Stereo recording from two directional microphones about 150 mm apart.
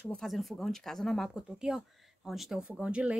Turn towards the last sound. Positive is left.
turn(degrees=-10)  # may be behind; listen again after turning